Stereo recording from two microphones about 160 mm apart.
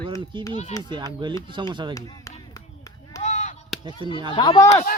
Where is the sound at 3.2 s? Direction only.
45° left (ahead or behind).